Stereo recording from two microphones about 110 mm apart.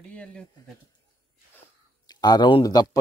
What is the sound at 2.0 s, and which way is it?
Speech, 40° left (ahead or behind).